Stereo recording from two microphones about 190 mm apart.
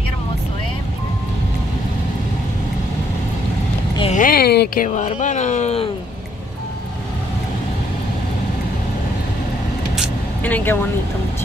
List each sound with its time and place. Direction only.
4.1 s speech: 45° left (ahead or behind)
4.8 s speech: 40° left (ahead or behind)
10.4 s speech: 10° left (ahead or behind)